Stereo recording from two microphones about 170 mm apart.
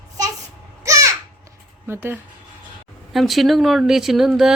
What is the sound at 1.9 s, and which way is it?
Speech, 15° right (ahead or behind).